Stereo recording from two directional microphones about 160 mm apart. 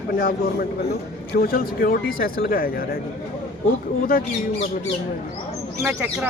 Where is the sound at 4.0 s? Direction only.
60° left (ahead or behind).